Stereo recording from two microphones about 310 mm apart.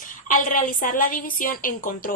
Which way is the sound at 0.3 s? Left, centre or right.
Left.